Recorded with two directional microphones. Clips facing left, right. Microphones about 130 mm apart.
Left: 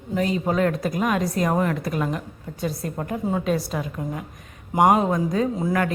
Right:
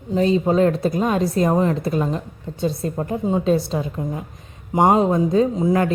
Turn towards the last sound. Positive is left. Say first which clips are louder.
# right 5 dB
turn(degrees=-20)  # may be behind; listen again after turning